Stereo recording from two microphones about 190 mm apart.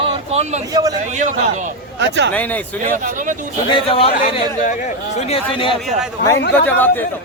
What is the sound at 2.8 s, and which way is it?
Speech, 45° right (ahead or behind).